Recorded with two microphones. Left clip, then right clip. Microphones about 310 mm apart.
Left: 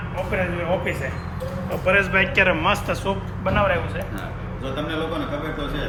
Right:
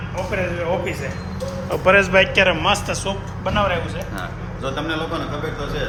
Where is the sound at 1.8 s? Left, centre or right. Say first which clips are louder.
Right 5 dB; centre.